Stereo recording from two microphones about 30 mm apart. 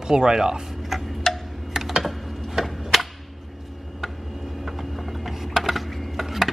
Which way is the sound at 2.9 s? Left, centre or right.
Centre.